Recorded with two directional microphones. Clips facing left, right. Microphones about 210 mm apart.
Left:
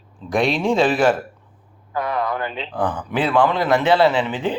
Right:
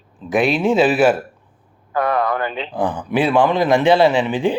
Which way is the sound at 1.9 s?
60° right (ahead or behind).